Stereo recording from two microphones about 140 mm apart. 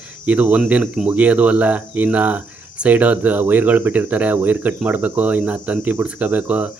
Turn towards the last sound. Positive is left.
turn(degrees=-10)  # may be behind; listen again after turning